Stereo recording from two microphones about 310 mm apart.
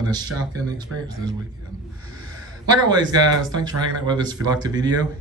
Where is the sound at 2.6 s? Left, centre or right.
Centre.